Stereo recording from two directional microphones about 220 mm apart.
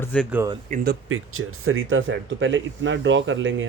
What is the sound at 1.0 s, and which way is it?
Speech, 70° right (ahead or behind).